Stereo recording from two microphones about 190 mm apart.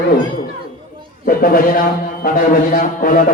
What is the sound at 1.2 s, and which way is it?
A man's voice, 50° left (ahead or behind).